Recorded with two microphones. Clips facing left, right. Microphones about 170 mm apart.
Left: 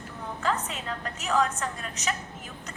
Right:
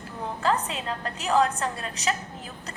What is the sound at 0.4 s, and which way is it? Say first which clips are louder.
A woman's voice: right 4 dB; 35° right (ahead or behind).